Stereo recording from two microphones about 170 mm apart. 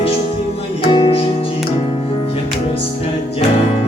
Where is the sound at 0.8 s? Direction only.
30° left (ahead or behind).